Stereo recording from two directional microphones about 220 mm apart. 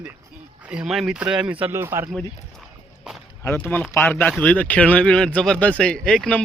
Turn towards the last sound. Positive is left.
turn(degrees=5)  # may be behind; listen again after turning